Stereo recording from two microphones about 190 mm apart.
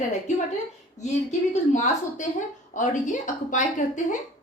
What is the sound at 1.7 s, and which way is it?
Speech, 40° left (ahead or behind).